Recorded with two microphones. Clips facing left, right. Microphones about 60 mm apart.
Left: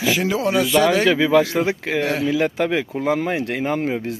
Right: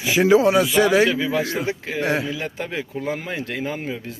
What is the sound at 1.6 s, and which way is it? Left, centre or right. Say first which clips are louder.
Speech: left 2 dB; left.